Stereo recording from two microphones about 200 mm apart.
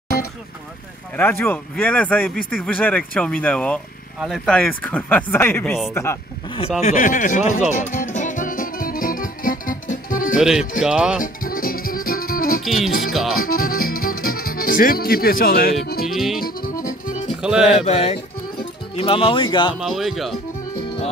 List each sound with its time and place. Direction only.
1.1 s speech: 10° left (ahead or behind)
6.8 s speech: 40° left (ahead or behind)
7.7 s music: 40° left (ahead or behind)
10.3 s speech: 5° right (ahead or behind)
11.1 s music: 45° left (ahead or behind)
12.6 s music: centre (ahead or behind)
13.4 s music: 50° left (ahead or behind)
16.1 s music: centre (ahead or behind)
17.3 s speech: 5° right (ahead or behind)
17.8 s speech: 30° left (ahead or behind)
19.8 s speech: centre (ahead or behind)